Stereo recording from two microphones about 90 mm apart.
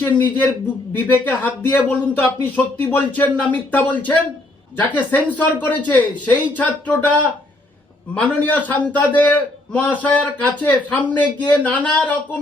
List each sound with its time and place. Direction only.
0.0 s a man's voice: 20° left (ahead or behind)